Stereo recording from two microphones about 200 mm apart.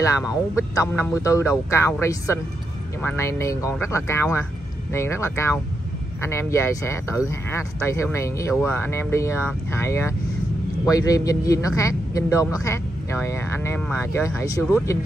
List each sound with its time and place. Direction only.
0.0 s speech: 15° left (ahead or behind)